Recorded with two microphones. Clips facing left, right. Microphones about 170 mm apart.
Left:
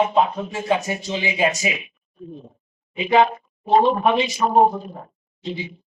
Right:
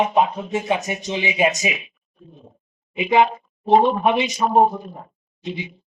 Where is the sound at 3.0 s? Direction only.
20° right (ahead or behind).